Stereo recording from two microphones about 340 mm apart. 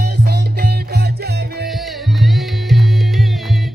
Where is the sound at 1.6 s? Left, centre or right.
Centre.